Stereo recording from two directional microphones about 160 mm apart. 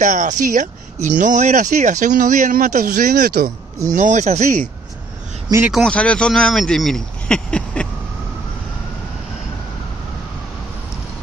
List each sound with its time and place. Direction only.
0.0 s speech: 50° right (ahead or behind); by 3.4 s 75° right (ahead or behind)
3.9 s speech: 50° right (ahead or behind)
5.7 s speech: 5° left (ahead or behind)